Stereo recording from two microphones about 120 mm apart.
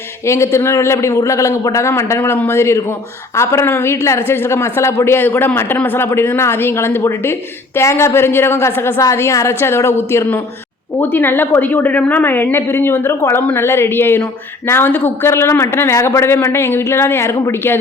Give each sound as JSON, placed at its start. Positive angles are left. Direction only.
{"t": 0.3, "sound": "a woman's voice", "side_deg": 25}